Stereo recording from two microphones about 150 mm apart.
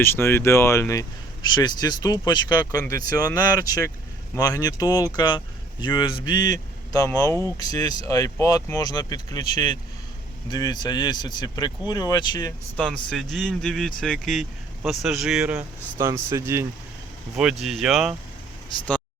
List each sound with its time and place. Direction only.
0.0 s speech: 15° left (ahead or behind)
13.1 s speech: 5° left (ahead or behind)
16.0 s speech: 20° right (ahead or behind)
17.3 s speech: 5° right (ahead or behind)